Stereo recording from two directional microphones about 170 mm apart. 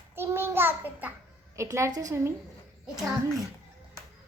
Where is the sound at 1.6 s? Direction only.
15° right (ahead or behind).